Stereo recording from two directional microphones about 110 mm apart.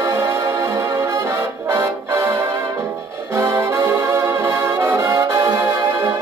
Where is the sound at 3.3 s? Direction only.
25° right (ahead or behind).